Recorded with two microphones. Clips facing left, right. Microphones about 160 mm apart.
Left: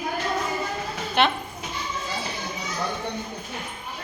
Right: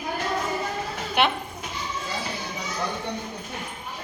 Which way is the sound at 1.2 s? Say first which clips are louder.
Left 1 dB; 10° right (ahead or behind).